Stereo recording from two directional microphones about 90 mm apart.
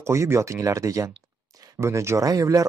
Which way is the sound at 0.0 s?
30° right (ahead or behind).